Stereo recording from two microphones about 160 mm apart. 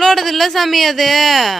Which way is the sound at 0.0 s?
Centre (ahead or behind).